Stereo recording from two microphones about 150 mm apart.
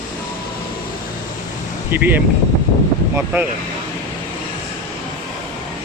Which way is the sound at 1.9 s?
10° right (ahead or behind).